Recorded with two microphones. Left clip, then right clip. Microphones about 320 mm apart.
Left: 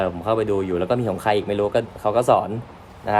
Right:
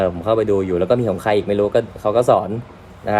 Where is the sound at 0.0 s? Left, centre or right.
Centre.